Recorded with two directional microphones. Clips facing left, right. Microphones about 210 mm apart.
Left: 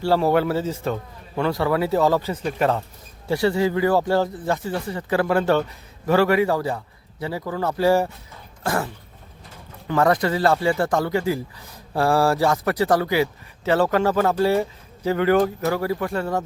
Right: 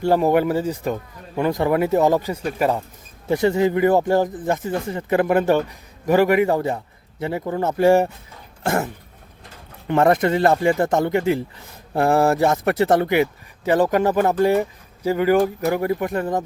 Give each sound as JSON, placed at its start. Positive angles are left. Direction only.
{"t": 0.0, "sound": "speech", "side_deg": -15}
{"t": 8.6, "sound": "a sound", "side_deg": -25}
{"t": 9.8, "sound": "speech", "side_deg": -20}